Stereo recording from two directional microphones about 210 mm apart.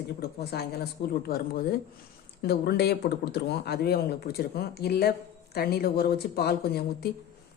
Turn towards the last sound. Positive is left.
turn(degrees=50)  # may be behind; listen again after turning